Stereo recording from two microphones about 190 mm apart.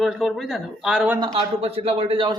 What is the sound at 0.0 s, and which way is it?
Speech, centre (ahead or behind).